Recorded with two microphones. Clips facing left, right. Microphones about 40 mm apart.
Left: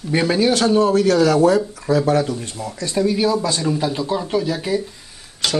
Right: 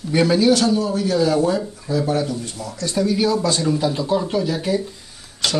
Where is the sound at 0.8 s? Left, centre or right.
Left.